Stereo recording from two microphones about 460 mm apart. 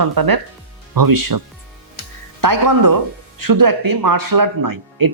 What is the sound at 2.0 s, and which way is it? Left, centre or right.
Music, right.